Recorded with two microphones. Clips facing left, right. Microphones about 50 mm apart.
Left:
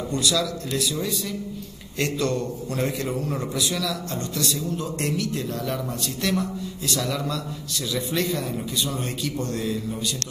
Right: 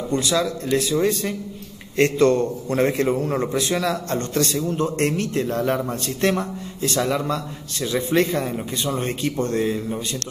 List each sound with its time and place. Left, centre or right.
0.1 s a man's voice: right